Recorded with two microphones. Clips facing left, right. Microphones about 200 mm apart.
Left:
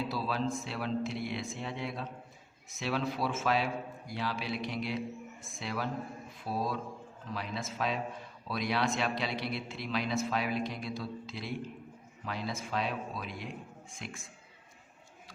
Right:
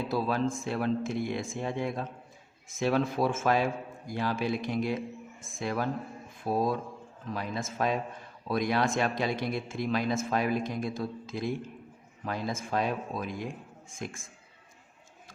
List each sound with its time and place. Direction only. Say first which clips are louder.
0.1 s a man's voice: right 5 dB; 50° right (ahead or behind)